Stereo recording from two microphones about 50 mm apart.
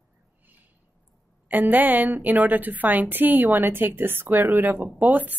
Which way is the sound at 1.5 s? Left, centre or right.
Right.